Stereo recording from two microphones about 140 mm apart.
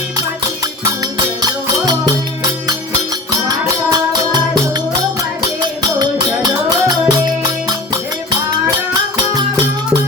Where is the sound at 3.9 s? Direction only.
30° right (ahead or behind).